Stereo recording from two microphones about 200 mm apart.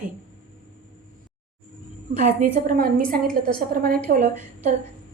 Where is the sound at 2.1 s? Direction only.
40° right (ahead or behind).